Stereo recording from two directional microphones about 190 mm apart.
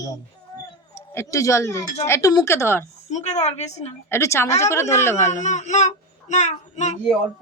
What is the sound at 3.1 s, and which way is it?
Speech, 35° left (ahead or behind).